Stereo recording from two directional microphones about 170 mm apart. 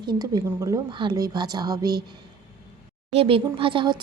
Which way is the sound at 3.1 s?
35° right (ahead or behind).